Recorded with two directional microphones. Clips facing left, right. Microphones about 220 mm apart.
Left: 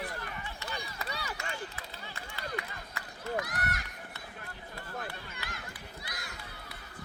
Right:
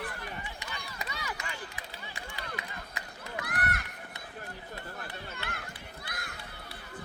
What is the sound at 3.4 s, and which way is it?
Run, 60° right (ahead or behind).